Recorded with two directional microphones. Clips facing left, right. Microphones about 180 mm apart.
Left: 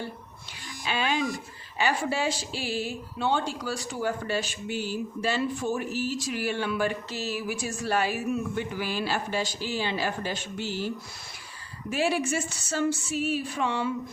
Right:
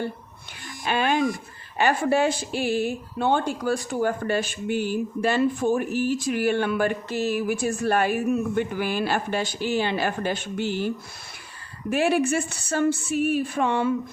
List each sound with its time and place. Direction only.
0.9 s speech: 55° right (ahead or behind)